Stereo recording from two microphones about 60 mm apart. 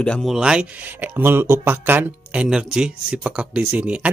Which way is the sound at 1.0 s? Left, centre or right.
Right.